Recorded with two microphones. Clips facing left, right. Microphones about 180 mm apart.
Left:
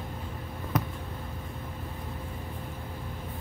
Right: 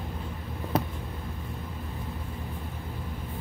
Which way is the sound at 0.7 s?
30° right (ahead or behind).